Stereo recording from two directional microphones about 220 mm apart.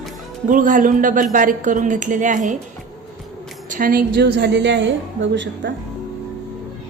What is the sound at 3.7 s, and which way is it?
A woman's voice, 40° right (ahead or behind).